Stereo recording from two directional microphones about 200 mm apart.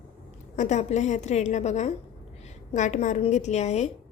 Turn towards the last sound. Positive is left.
turn(degrees=35)  # may be behind; listen again after turning